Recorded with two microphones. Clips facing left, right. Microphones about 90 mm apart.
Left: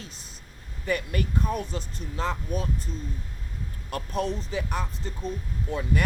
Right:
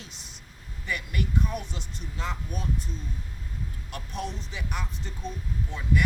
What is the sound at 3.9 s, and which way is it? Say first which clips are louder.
Speech: left 7 dB; 40° left (ahead or behind).